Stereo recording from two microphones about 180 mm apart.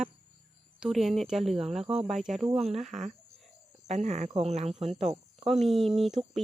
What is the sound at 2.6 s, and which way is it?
Speech, 35° right (ahead or behind).